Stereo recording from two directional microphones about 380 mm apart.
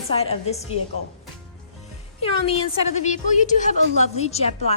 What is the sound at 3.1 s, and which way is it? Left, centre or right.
A woman's voice, centre.